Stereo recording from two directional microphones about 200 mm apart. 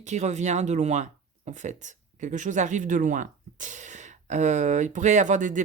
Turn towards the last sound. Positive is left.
turn(degrees=-40)  # may be behind; listen again after turning